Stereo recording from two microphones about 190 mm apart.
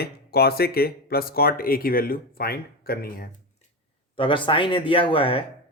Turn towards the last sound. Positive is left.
turn(degrees=30)  # may be behind; listen again after turning